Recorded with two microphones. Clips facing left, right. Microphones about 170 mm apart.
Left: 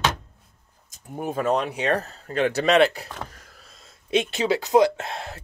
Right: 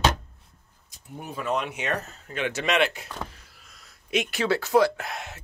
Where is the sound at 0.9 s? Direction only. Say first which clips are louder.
Left 8 dB; 45° left (ahead or behind).